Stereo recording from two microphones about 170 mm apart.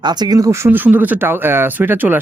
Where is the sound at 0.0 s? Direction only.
25° right (ahead or behind).